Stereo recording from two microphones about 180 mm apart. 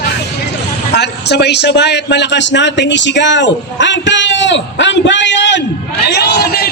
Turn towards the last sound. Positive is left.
turn(degrees=60)  # may be behind; listen again after turning